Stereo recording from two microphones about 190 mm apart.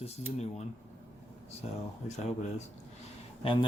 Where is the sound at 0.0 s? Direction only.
35° left (ahead or behind).